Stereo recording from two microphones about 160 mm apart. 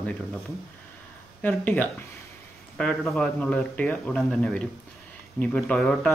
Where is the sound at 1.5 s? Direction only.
10° left (ahead or behind).